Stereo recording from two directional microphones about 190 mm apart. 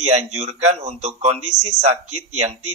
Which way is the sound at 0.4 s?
35° right (ahead or behind).